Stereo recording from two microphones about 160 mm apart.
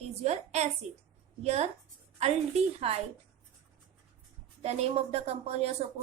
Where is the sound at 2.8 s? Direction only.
40° right (ahead or behind).